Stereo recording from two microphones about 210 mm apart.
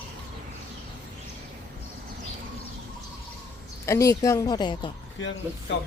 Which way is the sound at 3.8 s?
15° left (ahead or behind).